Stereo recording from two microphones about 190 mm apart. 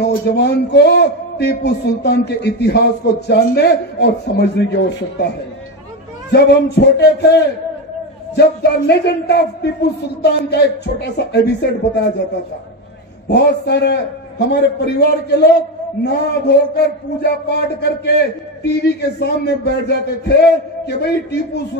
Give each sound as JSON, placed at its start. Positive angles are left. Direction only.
{"t": 0.0, "sound": "a man's voice", "side_deg": 60}
{"t": 6.3, "sound": "a man's voice", "side_deg": 60}
{"t": 13.3, "sound": "a man's voice", "side_deg": 60}